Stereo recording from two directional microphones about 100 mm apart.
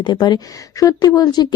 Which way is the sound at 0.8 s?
35° left (ahead or behind).